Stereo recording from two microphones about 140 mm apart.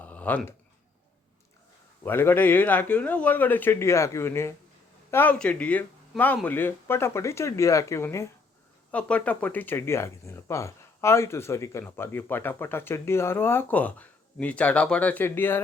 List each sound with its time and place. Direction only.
0.0 s a sound: 10° left (ahead or behind)
2.0 s speech: 15° left (ahead or behind)
8.9 s speech: 10° left (ahead or behind)